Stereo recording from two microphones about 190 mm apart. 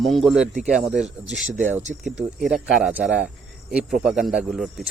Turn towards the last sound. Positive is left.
turn(degrees=0)  # may be behind; listen again after turning